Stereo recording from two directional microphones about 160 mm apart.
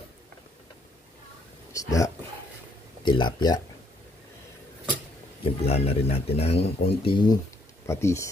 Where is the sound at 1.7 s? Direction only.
20° left (ahead or behind).